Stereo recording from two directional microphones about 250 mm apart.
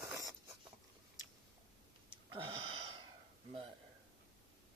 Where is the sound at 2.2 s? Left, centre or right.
Centre.